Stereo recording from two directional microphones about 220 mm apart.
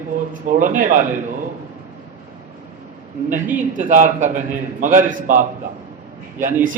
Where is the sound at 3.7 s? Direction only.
35° right (ahead or behind).